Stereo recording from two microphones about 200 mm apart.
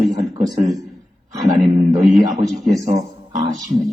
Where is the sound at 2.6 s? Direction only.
15° right (ahead or behind).